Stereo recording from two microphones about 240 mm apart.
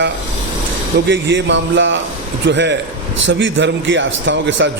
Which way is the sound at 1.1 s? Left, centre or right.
Right.